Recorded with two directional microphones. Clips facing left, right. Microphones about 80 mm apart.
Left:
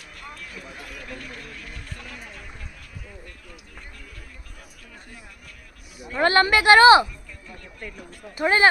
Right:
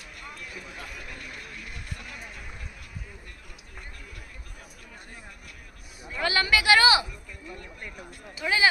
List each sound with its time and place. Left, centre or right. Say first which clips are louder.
1.2 s a sound: left 2 dB; centre
6.1 s a woman's voice: left 7 dB; left
8.4 s speech: left 6 dB; left